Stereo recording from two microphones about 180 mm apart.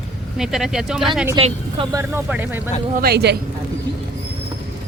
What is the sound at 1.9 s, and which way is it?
Speech, 10° right (ahead or behind).